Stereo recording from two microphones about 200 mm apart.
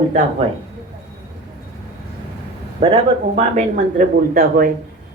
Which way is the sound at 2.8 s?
25° right (ahead or behind).